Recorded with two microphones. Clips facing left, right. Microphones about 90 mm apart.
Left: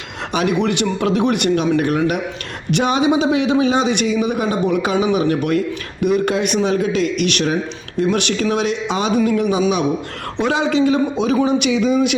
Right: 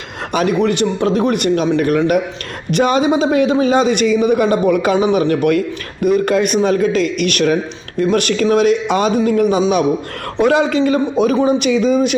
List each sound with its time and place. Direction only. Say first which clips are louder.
0.3 s a man's voice: right 3 dB; 40° right (ahead or behind)
4.9 s speech: right 3 dB; 35° right (ahead or behind)
5.3 s a man's voice: right 3 dB; 50° right (ahead or behind)